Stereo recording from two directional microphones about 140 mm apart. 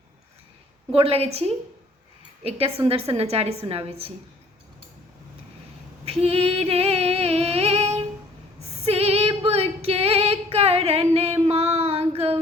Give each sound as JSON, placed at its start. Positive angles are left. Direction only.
{"t": 0.9, "sound": "a woman's voice", "side_deg": -45}
{"t": 6.1, "sound": "music", "side_deg": -45}
{"t": 8.8, "sound": "female singing", "side_deg": -45}